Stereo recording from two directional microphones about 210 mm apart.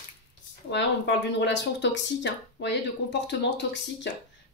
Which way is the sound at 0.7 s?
55° left (ahead or behind).